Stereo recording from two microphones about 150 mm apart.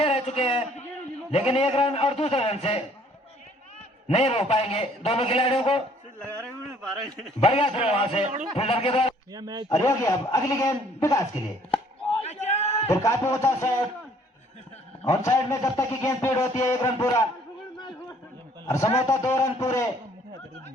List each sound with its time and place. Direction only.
0.0 s a man's voice: 40° left (ahead or behind)
4.1 s a man's voice: 45° left (ahead or behind)
6.1 s speech: 5° left (ahead or behind)
7.4 s a man's voice: 40° left (ahead or behind)
9.3 s a man's voice: 25° right (ahead or behind)
9.8 s a man's voice: 20° left (ahead or behind)
12.3 s a sound: 50° left (ahead or behind)
12.9 s a man's voice: 20° left (ahead or behind)
15.1 s a man's voice: 20° left (ahead or behind)
18.6 s a man's voice: 20° left (ahead or behind)